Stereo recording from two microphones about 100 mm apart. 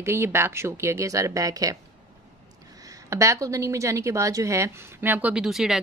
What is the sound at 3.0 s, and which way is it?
A woman's voice, 30° right (ahead or behind).